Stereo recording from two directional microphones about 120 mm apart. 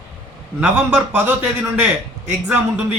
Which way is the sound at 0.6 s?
10° right (ahead or behind).